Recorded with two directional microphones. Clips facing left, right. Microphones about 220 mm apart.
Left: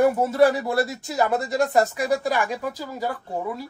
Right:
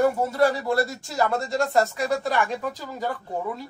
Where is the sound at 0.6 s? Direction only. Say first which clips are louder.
Even; centre (ahead or behind).